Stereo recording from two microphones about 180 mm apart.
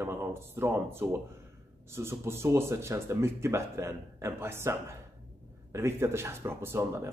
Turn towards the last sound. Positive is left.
turn(degrees=-15)  # may be behind; listen again after turning